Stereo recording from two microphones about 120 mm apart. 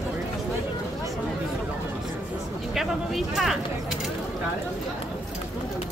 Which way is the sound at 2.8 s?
Centre (ahead or behind).